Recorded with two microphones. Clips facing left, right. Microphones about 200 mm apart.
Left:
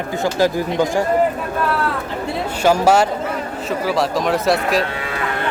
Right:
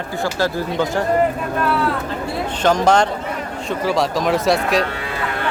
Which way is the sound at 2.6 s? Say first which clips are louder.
Left 1 dB; 10° left (ahead or behind).